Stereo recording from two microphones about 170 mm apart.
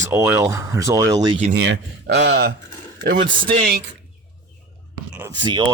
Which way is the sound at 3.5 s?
60° right (ahead or behind).